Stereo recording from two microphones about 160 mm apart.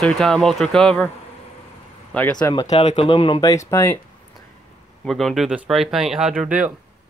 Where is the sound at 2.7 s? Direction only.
40° left (ahead or behind).